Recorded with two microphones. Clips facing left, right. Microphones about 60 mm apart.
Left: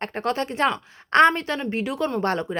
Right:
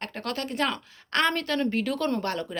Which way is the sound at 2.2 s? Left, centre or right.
Left.